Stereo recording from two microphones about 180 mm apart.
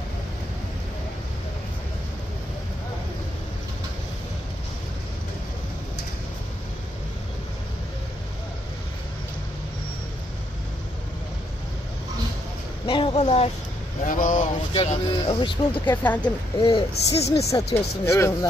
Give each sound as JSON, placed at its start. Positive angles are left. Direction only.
{"t": 12.8, "sound": "a sound", "side_deg": 30}
{"t": 14.0, "sound": "speech", "side_deg": 50}
{"t": 15.9, "sound": "speech", "side_deg": 10}
{"t": 16.2, "sound": "a woman's voice", "side_deg": 25}
{"t": 17.5, "sound": "speech", "side_deg": 15}